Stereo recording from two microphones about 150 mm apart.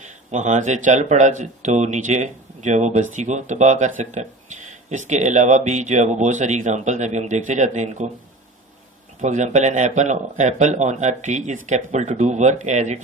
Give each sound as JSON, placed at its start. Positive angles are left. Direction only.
{"t": 0.0, "sound": "speech", "side_deg": -50}
{"t": 9.2, "sound": "speech", "side_deg": -50}